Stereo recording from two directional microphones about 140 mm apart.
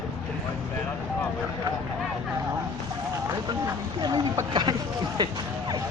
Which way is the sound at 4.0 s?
30° right (ahead or behind).